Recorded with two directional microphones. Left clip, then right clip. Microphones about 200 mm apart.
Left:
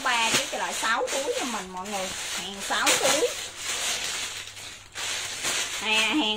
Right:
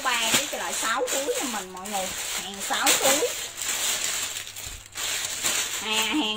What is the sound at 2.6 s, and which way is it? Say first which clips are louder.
Speech: even; 30° left (ahead or behind).